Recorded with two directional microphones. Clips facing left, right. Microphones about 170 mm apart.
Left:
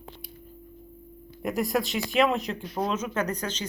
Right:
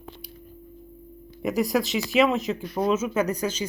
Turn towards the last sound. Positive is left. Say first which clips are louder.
# right 4 dB
turn(degrees=-10)  # may be behind; listen again after turning